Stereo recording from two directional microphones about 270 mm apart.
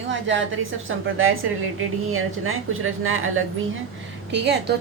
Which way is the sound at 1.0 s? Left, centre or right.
Right.